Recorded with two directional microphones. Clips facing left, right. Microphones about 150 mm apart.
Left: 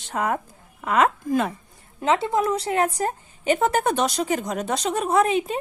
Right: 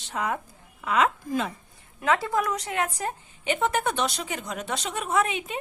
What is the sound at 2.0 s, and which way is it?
A woman's voice, 25° left (ahead or behind).